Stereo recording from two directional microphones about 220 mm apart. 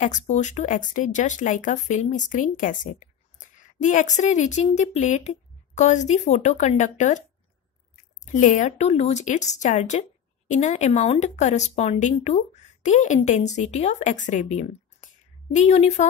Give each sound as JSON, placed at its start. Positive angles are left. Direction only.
{"t": 0.0, "sound": "speech", "side_deg": 35}
{"t": 8.3, "sound": "speech", "side_deg": 35}